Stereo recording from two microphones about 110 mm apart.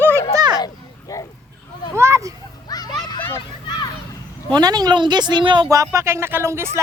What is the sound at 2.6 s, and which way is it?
Children playing, 35° left (ahead or behind).